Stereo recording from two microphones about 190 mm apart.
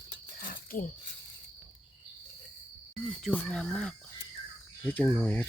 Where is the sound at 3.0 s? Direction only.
5° left (ahead or behind).